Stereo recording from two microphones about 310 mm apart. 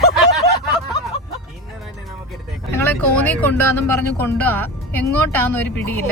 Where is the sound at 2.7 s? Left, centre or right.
Centre.